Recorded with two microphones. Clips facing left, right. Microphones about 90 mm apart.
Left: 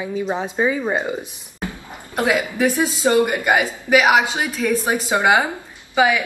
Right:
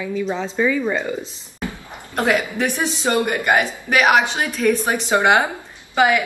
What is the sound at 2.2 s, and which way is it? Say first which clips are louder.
A woman's voice: left 1 dB; 15° left (ahead or behind).